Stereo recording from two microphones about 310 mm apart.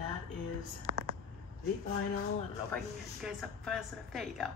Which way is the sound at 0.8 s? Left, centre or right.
Right.